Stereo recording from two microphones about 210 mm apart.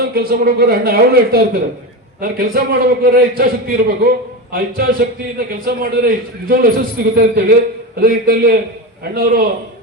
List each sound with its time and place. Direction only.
0.1 s a man's voice: 45° right (ahead or behind)